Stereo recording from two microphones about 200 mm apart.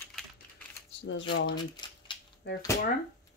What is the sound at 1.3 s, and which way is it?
Speech, 60° left (ahead or behind).